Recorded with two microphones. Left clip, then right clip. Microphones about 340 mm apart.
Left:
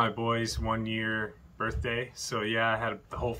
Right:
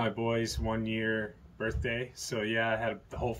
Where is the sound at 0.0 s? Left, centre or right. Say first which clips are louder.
Left 3 dB; centre.